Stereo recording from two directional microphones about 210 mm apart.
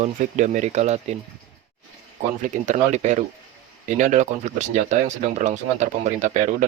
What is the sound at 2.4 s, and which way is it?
Speech, 35° right (ahead or behind).